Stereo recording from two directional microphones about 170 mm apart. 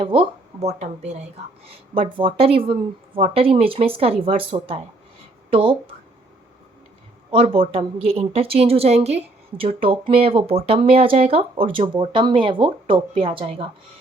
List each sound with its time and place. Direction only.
0.0 s a woman's voice: 30° right (ahead or behind)
7.3 s a woman's voice: 30° right (ahead or behind)